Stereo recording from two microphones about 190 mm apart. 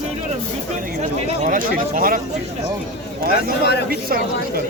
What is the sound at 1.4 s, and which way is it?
Speech, 45° right (ahead or behind).